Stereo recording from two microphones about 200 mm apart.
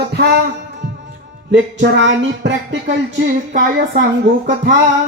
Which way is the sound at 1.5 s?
65° right (ahead or behind).